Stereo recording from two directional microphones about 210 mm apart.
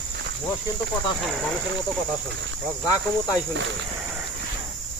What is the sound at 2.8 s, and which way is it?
Speech, 15° left (ahead or behind).